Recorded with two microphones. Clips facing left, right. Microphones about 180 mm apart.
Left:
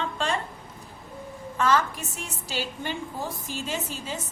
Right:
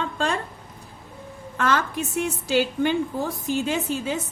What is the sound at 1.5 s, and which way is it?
A woman's voice, 60° right (ahead or behind).